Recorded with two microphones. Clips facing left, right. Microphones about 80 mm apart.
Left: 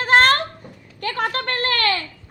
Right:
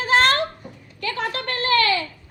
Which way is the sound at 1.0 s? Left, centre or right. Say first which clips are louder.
Left 3 dB; left.